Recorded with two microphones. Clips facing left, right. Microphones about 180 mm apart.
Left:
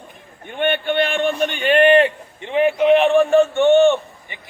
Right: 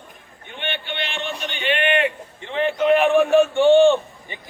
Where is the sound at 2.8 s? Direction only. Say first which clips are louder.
Left 1 dB; centre (ahead or behind).